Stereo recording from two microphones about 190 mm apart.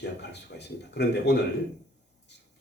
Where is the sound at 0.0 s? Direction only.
65° left (ahead or behind).